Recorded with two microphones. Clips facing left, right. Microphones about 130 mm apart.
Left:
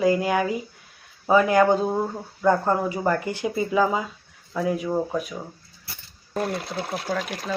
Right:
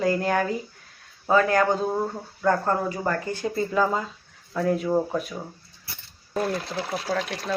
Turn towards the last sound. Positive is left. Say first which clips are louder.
# even
turn(degrees=5)  # may be behind; listen again after turning